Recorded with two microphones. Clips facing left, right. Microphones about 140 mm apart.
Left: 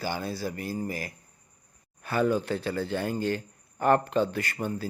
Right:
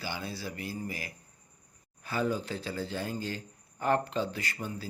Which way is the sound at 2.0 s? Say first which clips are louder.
Left 6 dB; 65° left (ahead or behind).